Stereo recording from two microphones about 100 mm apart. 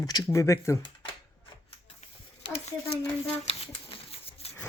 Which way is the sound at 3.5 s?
75° left (ahead or behind).